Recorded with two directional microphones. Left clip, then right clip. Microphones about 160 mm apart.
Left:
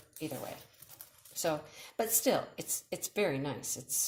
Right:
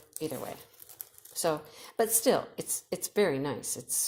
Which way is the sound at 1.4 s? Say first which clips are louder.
Right 4 dB; 45° right (ahead or behind).